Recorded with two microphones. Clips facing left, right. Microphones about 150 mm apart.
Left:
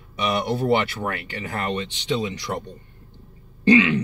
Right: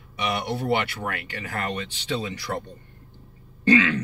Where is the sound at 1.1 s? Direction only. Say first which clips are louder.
Left 3 dB; 25° left (ahead or behind).